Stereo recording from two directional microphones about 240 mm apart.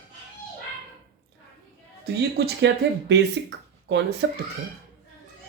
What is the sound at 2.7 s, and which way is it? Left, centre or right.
Speech, right.